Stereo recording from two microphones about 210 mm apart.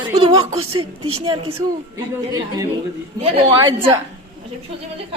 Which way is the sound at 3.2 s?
30° right (ahead or behind).